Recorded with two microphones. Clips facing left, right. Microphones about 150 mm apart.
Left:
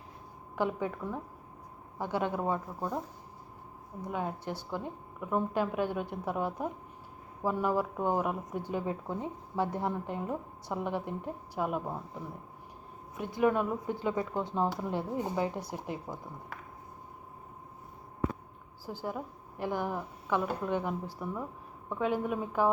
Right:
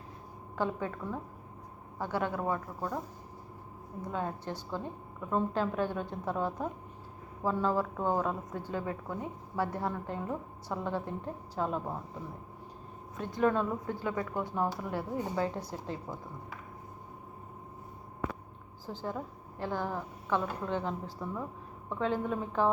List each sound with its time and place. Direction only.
0.5 s a woman's voice: 15° left (ahead or behind)
4.0 s a woman's voice: 10° left (ahead or behind)
13.1 s a woman's voice: 15° left (ahead or behind)
18.9 s a woman's voice: 10° left (ahead or behind)